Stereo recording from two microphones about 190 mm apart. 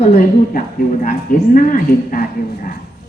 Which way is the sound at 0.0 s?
45° left (ahead or behind).